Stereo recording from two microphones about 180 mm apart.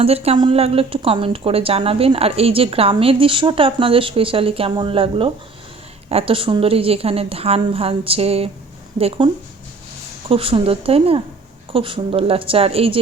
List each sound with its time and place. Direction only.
0.0 s speech: 35° right (ahead or behind)